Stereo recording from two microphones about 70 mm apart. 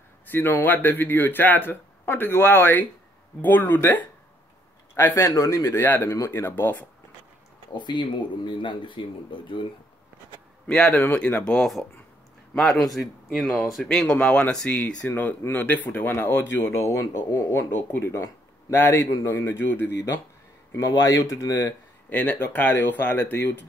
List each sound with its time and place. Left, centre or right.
0.3 s speech: left
7.7 s speech: left
10.7 s speech: centre
13.8 s speech: centre
15.0 s speech: left
20.9 s speech: left
22.1 s speech: left